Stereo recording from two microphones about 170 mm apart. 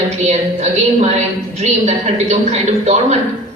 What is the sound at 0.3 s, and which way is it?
A woman's voice, 40° right (ahead or behind).